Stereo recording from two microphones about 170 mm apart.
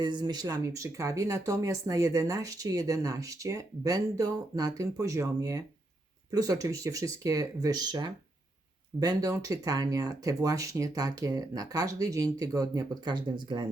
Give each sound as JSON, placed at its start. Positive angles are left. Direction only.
{"t": 0.0, "sound": "speech", "side_deg": -25}